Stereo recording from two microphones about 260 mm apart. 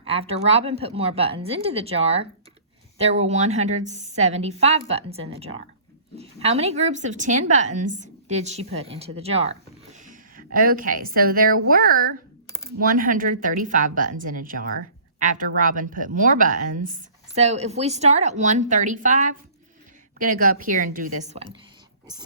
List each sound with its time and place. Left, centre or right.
0.0 s a woman's voice: right